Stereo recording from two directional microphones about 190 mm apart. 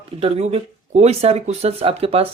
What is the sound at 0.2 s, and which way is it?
Speech, 30° right (ahead or behind).